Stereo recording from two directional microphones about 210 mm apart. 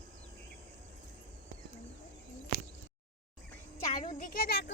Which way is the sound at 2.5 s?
55° right (ahead or behind).